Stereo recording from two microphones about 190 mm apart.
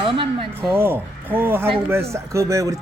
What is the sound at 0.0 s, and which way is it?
Speech, 25° right (ahead or behind).